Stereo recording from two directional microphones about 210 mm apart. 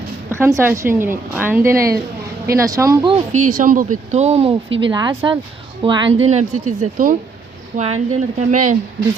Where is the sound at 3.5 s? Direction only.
40° right (ahead or behind).